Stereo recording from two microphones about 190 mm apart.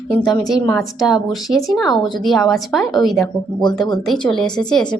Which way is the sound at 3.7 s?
Centre (ahead or behind).